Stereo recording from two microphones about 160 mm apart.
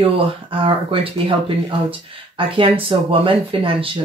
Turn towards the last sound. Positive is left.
turn(degrees=-35)  # may be behind; listen again after turning